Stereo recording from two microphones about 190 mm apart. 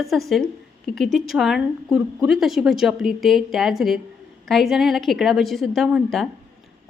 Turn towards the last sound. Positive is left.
turn(degrees=0)  # may be behind; listen again after turning